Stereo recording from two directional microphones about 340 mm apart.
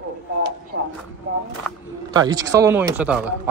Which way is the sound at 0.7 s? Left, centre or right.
Right.